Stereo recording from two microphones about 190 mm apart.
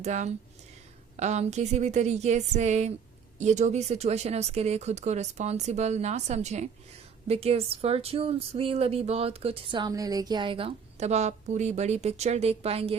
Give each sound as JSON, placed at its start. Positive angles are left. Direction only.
{"t": 0.0, "sound": "speech", "side_deg": -40}